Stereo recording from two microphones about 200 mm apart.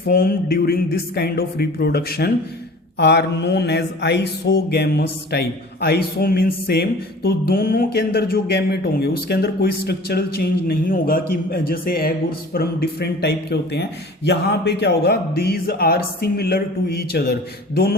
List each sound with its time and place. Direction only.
0.1 s mantra: 50° left (ahead or behind)
12.5 s speech: 55° left (ahead or behind)
14.3 s mantra: 60° left (ahead or behind)